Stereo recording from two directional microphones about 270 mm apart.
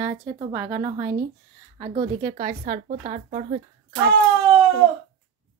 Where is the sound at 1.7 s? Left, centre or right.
Right.